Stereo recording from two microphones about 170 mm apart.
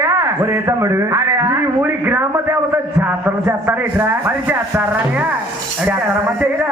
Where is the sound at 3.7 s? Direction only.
10° right (ahead or behind).